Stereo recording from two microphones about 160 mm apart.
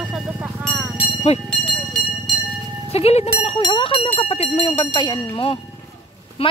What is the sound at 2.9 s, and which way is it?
Speech, 40° left (ahead or behind).